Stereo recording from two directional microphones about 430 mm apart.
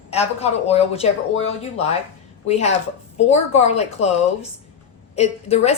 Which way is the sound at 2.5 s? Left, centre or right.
Centre.